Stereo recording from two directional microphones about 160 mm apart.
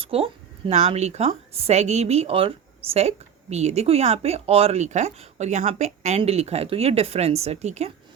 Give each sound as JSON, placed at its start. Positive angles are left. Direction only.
{"t": 0.0, "sound": "a woman's voice", "side_deg": -35}